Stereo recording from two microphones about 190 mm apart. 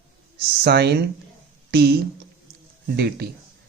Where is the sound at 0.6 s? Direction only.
60° right (ahead or behind).